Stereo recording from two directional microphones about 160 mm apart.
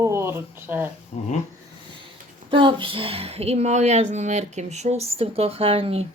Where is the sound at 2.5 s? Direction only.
30° right (ahead or behind).